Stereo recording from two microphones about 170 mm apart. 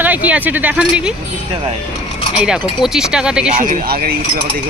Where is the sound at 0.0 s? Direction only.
10° right (ahead or behind).